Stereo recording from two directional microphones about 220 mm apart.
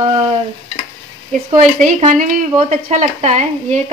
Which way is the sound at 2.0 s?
35° right (ahead or behind).